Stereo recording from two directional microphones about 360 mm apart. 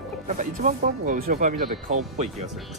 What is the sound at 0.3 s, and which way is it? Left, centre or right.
Speech, right.